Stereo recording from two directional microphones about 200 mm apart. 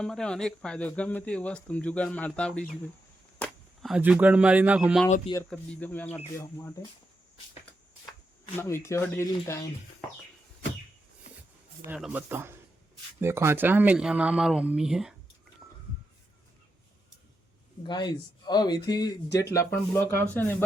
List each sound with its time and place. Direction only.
0.0 s speech: 5° left (ahead or behind)
5.4 s speech: 10° left (ahead or behind)
8.5 s speech: 15° left (ahead or behind)
11.9 s speech: 5° right (ahead or behind)
17.8 s speech: 20° left (ahead or behind)